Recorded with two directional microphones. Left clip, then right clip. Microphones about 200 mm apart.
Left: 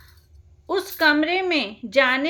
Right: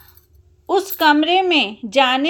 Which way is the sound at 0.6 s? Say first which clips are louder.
Right 5 dB; 30° right (ahead or behind).